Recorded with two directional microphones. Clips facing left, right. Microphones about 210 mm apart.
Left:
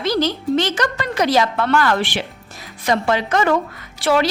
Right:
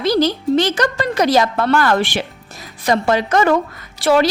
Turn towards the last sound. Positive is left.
turn(degrees=-40)  # may be behind; listen again after turning